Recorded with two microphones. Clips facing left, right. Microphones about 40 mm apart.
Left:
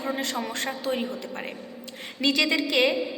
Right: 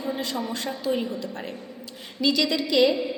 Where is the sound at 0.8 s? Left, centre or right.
Left.